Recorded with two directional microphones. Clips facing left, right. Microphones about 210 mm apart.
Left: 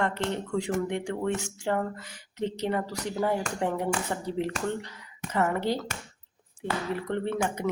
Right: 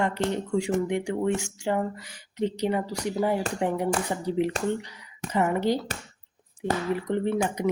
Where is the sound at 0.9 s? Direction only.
10° right (ahead or behind).